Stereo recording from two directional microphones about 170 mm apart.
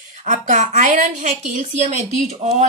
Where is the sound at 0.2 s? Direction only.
50° right (ahead or behind).